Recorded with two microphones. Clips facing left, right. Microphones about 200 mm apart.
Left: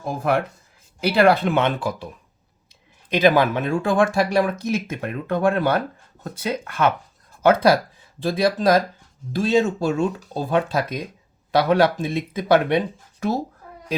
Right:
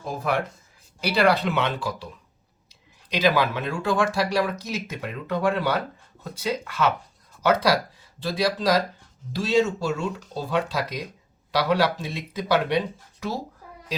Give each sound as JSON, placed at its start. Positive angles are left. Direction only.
{"t": 0.0, "sound": "speech", "side_deg": 55}
{"t": 3.1, "sound": "speech", "side_deg": 50}